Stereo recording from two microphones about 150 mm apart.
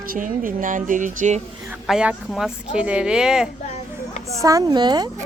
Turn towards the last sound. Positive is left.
turn(degrees=-30)  # may be behind; listen again after turning